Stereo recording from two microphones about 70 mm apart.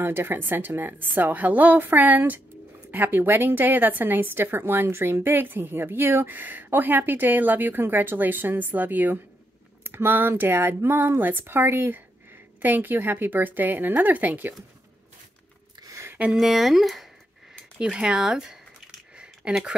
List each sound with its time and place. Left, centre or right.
0.0 s a woman's voice: right
16.3 s speech: centre
17.7 s speech: centre
19.1 s a sound: centre